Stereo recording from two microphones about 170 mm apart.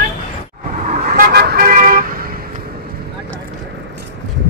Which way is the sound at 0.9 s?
60° right (ahead or behind).